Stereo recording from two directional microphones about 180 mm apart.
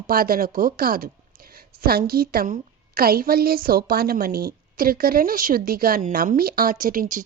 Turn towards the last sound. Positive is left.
turn(degrees=-50)  # may be behind; listen again after turning